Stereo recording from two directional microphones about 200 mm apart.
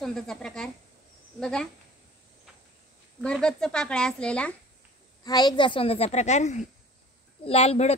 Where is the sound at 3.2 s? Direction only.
5° left (ahead or behind).